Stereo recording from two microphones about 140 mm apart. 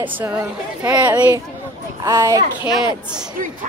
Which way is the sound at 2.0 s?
25° right (ahead or behind).